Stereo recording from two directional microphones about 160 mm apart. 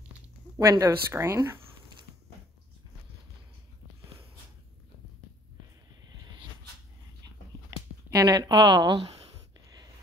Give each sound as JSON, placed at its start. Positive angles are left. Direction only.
{"t": 0.6, "sound": "speech", "side_deg": -20}
{"t": 8.1, "sound": "speech", "side_deg": -20}